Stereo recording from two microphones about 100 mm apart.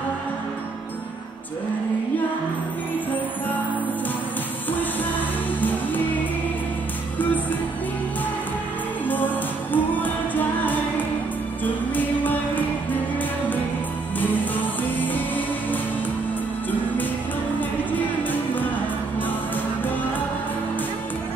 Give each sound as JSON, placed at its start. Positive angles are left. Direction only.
{"t": 9.0, "sound": "music", "side_deg": 20}
{"t": 14.2, "sound": "music", "side_deg": 20}
{"t": 17.6, "sound": "music", "side_deg": 15}